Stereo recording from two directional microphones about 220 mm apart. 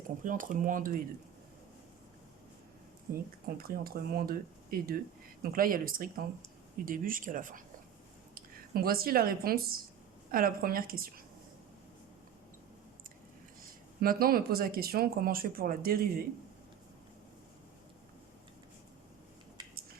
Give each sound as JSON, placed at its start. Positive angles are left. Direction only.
{"t": 0.3, "sound": "speech", "side_deg": -35}
{"t": 3.6, "sound": "speech", "side_deg": -45}
{"t": 14.0, "sound": "speech", "side_deg": -40}